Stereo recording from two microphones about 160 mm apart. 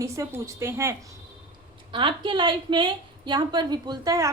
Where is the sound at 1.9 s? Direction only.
30° right (ahead or behind).